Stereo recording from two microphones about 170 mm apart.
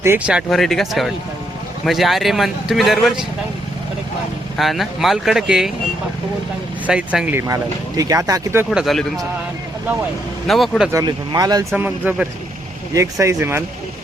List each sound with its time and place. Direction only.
0.0 s speech: 10° right (ahead or behind)
4.5 s speech: centre (ahead or behind)
6.8 s speech: 5° right (ahead or behind)
8.7 s speech: centre (ahead or behind)
10.4 s speech: centre (ahead or behind)
10.9 s speech: 25° right (ahead or behind)
11.8 s speech: 10° right (ahead or behind)
12.9 s speech: 20° right (ahead or behind)